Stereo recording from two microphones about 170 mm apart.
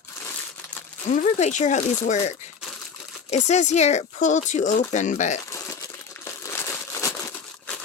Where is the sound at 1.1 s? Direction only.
45° left (ahead or behind).